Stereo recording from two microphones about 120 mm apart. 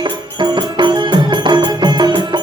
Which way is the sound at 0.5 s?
40° right (ahead or behind).